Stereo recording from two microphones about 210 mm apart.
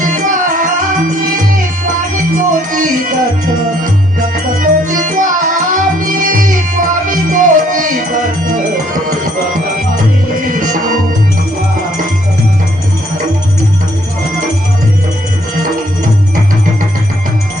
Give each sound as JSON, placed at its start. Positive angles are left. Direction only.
{"t": 0.0, "sound": "music", "side_deg": -40}
{"t": 2.1, "sound": "music", "side_deg": -40}
{"t": 4.6, "sound": "music", "side_deg": -40}
{"t": 10.5, "sound": "music", "side_deg": -40}